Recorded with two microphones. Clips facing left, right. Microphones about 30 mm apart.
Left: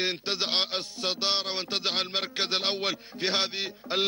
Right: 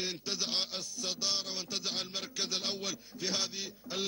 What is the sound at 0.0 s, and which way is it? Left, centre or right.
A man's voice, left.